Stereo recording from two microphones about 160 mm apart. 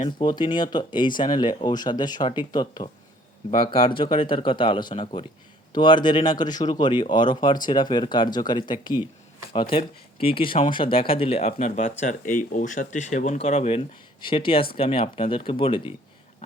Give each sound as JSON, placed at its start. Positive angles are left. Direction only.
{"t": 0.2, "sound": "speech", "side_deg": 30}